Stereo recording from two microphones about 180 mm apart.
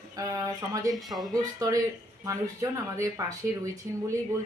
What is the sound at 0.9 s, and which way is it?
Speech, centre (ahead or behind).